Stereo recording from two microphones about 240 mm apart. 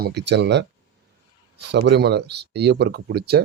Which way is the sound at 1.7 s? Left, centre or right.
Right.